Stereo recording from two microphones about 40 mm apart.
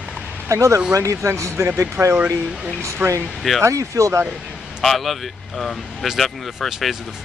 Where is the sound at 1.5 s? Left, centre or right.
Right.